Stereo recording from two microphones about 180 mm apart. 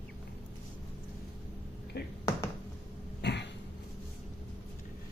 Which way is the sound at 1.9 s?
65° left (ahead or behind).